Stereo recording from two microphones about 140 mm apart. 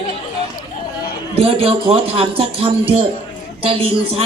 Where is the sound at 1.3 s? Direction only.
45° right (ahead or behind).